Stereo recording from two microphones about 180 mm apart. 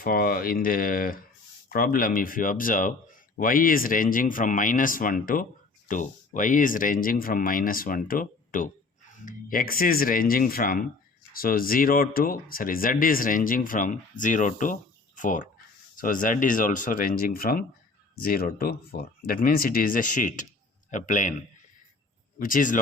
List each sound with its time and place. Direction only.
0.0 s speech: 55° left (ahead or behind)
22.4 s speech: 50° left (ahead or behind)